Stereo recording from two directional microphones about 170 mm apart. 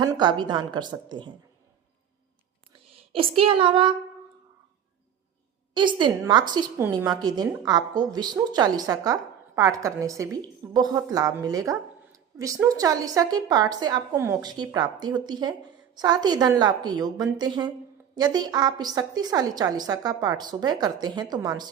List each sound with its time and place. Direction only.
0.0 s a woman's voice: 25° right (ahead or behind)
2.9 s a sound: 35° right (ahead or behind)
5.7 s a woman's voice: 25° right (ahead or behind)